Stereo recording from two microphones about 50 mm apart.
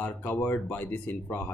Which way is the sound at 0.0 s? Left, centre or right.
Left.